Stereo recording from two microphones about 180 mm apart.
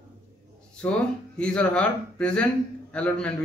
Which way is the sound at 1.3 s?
5° left (ahead or behind).